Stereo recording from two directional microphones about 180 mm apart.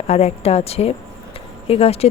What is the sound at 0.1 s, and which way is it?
Speech, 35° left (ahead or behind).